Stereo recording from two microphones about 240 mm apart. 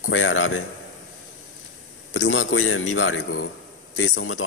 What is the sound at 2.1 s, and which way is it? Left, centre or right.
A man's voice, left.